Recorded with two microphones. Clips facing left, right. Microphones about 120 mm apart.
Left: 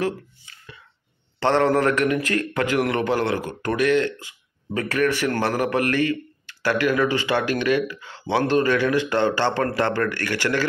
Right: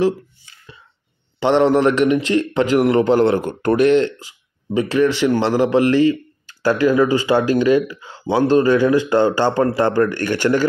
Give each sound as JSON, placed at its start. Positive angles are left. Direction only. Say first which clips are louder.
{"t": 1.4, "sound": "a man's voice", "louder": "right 5 dB", "side_deg": -20}
{"t": 8.9, "sound": "speech", "louder": "right 6 dB", "side_deg": -35}
{"t": 9.5, "sound": "a man's voice", "louder": "right 5 dB", "side_deg": -20}